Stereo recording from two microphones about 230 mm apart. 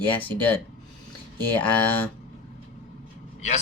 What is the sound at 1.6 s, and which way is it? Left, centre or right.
Speech, centre.